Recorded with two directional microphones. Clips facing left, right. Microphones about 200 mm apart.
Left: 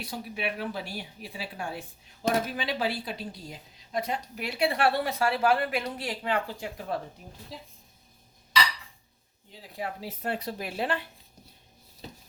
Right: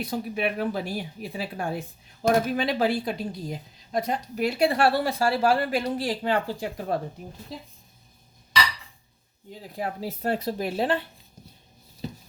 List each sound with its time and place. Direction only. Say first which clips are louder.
0.0 s a woman's voice: right 6 dB; 45° right (ahead or behind)
9.5 s a woman's voice: right 4 dB; 45° right (ahead or behind)